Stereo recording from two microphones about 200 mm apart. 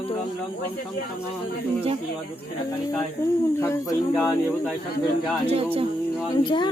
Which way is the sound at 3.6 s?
15° left (ahead or behind).